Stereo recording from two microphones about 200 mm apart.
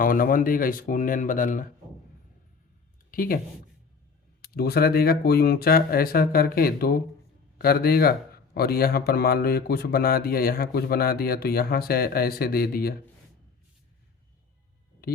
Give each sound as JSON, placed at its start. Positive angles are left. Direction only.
{"t": 0.0, "sound": "speech", "side_deg": 45}
{"t": 3.1, "sound": "speech", "side_deg": 45}
{"t": 4.4, "sound": "speech", "side_deg": 50}
{"t": 15.0, "sound": "a sound", "side_deg": 50}